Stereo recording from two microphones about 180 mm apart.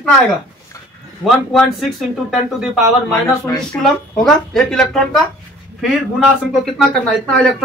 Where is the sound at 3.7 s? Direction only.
5° left (ahead or behind).